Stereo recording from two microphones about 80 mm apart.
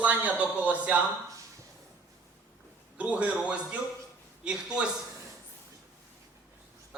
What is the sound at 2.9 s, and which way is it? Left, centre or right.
A man's voice, centre.